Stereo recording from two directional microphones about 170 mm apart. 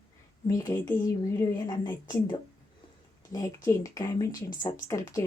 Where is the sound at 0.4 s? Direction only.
25° left (ahead or behind).